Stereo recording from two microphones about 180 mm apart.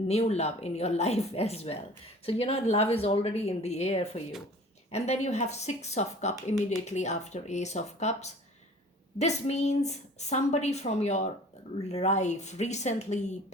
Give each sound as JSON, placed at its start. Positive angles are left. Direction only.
{"t": 0.1, "sound": "a woman's voice", "side_deg": 35}